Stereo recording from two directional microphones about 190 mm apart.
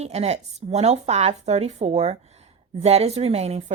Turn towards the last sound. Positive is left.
turn(degrees=-35)  # may be behind; listen again after turning